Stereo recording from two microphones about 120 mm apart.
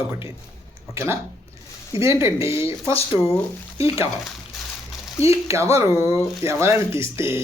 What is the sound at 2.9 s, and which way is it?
Speech, 55° left (ahead or behind).